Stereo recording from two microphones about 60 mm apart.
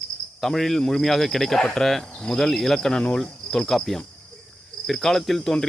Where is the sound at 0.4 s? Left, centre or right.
Centre.